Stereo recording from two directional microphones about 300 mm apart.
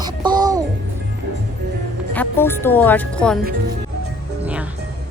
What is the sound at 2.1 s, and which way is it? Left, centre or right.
A woman's voice, centre.